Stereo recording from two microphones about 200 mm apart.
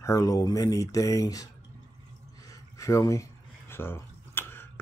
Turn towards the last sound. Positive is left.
turn(degrees=10)  # may be behind; listen again after turning